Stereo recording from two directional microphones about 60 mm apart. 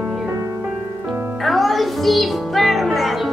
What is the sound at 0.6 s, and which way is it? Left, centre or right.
Music, right.